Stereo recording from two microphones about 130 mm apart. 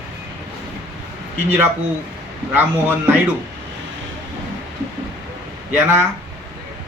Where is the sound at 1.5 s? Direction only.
15° right (ahead or behind).